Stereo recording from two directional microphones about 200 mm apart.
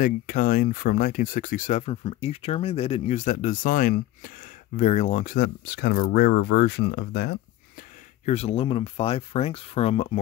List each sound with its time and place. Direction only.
0.0 s speech: 45° left (ahead or behind); by 7.3 s 60° left (ahead or behind)
8.3 s speech: 30° left (ahead or behind)